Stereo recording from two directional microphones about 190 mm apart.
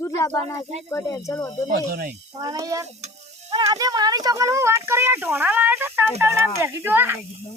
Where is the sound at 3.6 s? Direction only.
20° right (ahead or behind).